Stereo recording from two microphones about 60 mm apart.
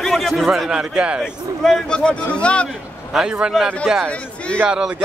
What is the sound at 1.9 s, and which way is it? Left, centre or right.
Speech, centre.